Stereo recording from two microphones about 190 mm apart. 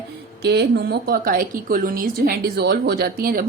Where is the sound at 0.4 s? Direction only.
60° right (ahead or behind).